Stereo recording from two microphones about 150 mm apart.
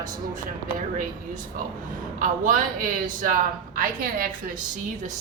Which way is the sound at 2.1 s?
65° right (ahead or behind).